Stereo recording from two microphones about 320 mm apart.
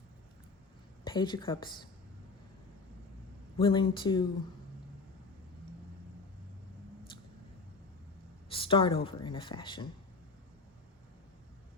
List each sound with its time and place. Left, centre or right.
1.0 s a woman's voice: centre
3.6 s a woman's voice: centre
8.4 s a sound: centre
9.0 s a woman's voice: centre